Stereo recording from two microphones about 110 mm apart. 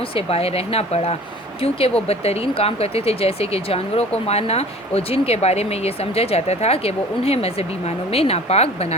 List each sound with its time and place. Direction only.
0.1 s speech: 60° left (ahead or behind)